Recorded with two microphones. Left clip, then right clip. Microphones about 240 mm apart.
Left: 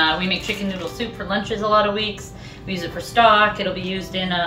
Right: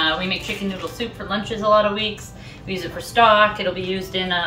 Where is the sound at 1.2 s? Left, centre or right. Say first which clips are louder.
Right 2 dB; centre.